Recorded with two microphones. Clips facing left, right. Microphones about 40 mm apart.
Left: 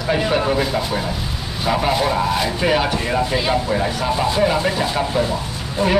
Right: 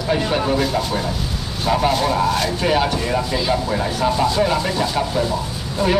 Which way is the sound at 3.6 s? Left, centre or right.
Centre.